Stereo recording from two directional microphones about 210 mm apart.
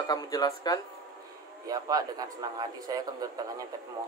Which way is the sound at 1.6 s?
15° right (ahead or behind).